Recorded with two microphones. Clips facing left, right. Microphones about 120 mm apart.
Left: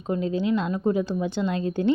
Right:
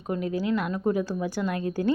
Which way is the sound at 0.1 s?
25° left (ahead or behind).